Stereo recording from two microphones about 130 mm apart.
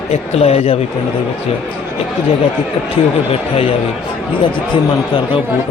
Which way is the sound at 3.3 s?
50° left (ahead or behind).